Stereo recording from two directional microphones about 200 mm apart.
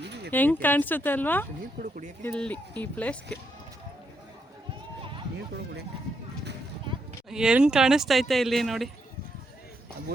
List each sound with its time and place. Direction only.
0.0 s a sound: 60° right (ahead or behind)
0.3 s speech: 10° left (ahead or behind)
1.8 s speech: 40° right (ahead or behind)
2.2 s speech: 5° left (ahead or behind)
7.3 s speech: 5° right (ahead or behind)